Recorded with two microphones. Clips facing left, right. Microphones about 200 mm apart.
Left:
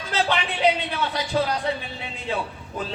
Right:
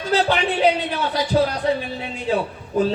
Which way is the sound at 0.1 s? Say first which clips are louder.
Right 5 dB; 40° right (ahead or behind).